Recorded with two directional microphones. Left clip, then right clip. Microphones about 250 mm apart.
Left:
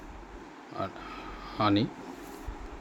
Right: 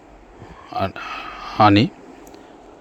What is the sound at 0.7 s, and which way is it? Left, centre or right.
Speech, right.